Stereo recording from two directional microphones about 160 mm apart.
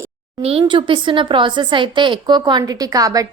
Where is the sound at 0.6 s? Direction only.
30° right (ahead or behind).